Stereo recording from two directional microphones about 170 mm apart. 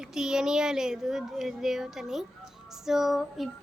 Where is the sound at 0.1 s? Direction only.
5° right (ahead or behind).